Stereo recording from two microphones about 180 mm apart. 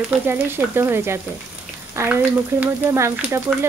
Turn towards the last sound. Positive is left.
turn(degrees=-5)  # may be behind; listen again after turning